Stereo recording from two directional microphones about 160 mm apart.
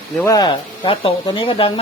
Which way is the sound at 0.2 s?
20° left (ahead or behind).